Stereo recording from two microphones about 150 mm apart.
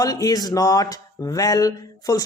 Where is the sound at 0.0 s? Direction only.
25° left (ahead or behind).